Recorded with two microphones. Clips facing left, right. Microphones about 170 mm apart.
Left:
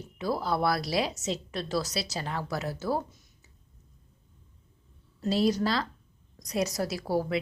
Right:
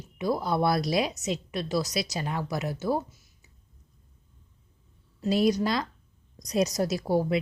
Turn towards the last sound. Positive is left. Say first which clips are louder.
# right 3 dB
turn(degrees=-20)  # may be behind; listen again after turning